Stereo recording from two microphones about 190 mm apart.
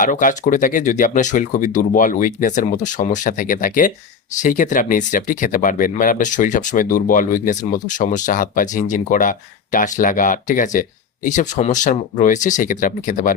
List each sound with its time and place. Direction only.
0.0 s speech: 45° left (ahead or behind)